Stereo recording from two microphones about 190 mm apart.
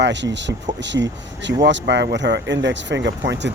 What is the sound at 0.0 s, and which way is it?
Speech, 70° right (ahead or behind).